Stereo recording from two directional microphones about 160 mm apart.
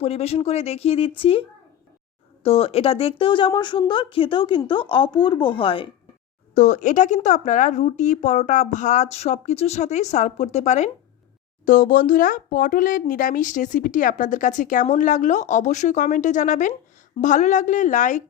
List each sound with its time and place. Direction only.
0.0 s a woman's voice: 40° left (ahead or behind)
6.5 s speech: 50° left (ahead or behind)